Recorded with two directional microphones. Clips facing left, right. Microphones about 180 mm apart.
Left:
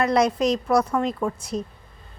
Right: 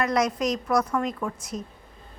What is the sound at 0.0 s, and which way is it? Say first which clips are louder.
A woman's voice: left 4 dB; 30° left (ahead or behind).